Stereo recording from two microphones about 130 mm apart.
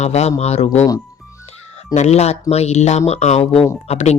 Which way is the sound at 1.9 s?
55° left (ahead or behind).